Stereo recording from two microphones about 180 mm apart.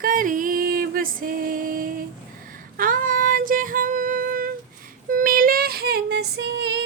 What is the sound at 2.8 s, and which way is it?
Female singing, 50° right (ahead or behind).